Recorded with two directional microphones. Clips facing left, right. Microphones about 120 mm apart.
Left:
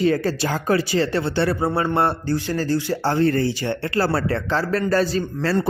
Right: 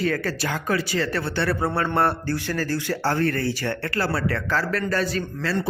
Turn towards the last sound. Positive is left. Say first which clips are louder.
# left 4 dB
turn(degrees=40)  # may be behind; listen again after turning